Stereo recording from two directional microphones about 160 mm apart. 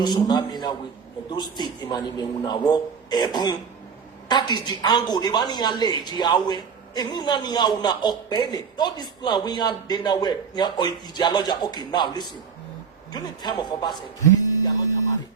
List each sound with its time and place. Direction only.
0.0 s a woman's voice: 25° left (ahead or behind)